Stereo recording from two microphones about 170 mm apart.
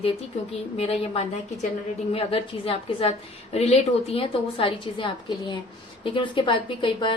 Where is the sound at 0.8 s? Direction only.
35° left (ahead or behind).